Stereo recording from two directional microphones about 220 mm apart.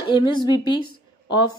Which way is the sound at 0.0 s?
20° left (ahead or behind).